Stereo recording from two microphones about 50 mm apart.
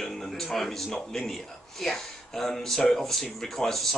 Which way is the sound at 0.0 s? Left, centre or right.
Centre.